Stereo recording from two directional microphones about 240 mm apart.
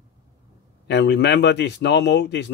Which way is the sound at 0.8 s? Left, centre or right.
Left.